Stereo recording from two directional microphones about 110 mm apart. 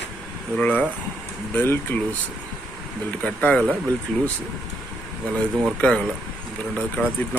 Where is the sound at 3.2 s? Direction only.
10° left (ahead or behind).